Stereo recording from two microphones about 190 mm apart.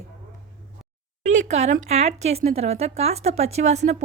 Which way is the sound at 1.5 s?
35° right (ahead or behind).